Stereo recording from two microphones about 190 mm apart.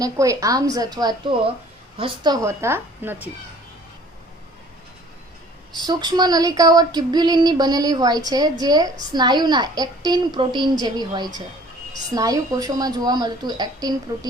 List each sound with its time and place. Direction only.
0.0 s female singing: 15° right (ahead or behind)
2.0 s a woman's voice: 25° right (ahead or behind); by 3.2 s 10° right (ahead or behind)
5.7 s female singing: 20° right (ahead or behind)